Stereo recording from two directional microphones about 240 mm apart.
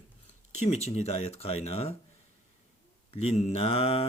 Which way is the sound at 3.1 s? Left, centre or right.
Left.